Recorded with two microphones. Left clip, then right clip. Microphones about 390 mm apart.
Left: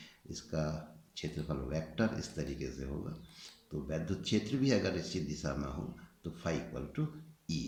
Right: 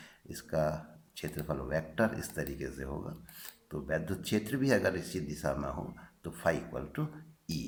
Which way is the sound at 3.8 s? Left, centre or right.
Centre.